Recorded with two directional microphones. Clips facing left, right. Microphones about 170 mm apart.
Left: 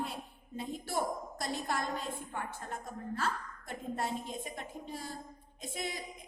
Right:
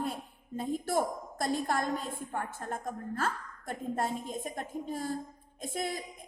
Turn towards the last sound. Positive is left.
turn(degrees=-50)  # may be behind; listen again after turning